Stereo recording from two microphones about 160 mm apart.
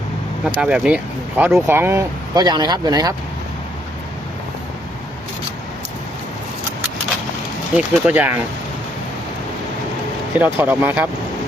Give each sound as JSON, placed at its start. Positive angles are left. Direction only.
{"t": 0.4, "sound": "speech", "side_deg": -5}
{"t": 7.8, "sound": "speech", "side_deg": -10}
{"t": 10.3, "sound": "speech", "side_deg": -10}